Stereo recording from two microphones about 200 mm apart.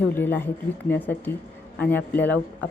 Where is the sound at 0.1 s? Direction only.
10° left (ahead or behind).